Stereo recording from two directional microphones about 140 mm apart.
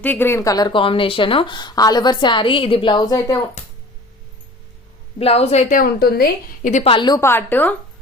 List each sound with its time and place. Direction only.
0.0 s speech: 15° left (ahead or behind)
5.2 s speech: 45° left (ahead or behind)
5.7 s a woman's voice: 90° left; by 6.8 s 65° left (ahead or behind)
6.8 s speech: 35° left (ahead or behind)
7.2 s a woman's voice: 15° left (ahead or behind)